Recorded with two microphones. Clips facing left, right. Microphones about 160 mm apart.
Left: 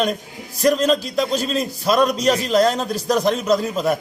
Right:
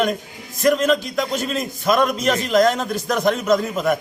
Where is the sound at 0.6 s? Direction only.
30° left (ahead or behind).